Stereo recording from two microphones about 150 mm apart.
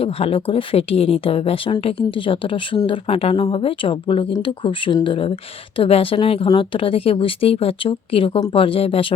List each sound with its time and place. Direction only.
0.0 s speech: 40° left (ahead or behind)